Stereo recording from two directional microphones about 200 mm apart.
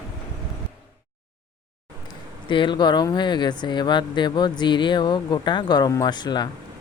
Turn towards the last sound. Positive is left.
turn(degrees=20)  # may be behind; listen again after turning